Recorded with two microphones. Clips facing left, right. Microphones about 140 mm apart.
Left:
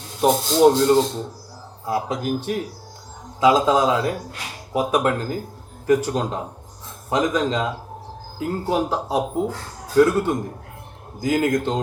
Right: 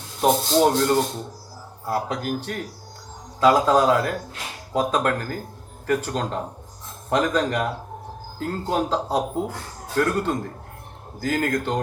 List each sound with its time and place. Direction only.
0.2 s speech: 15° left (ahead or behind)